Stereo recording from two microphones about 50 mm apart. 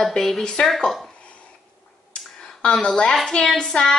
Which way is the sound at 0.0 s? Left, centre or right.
Centre.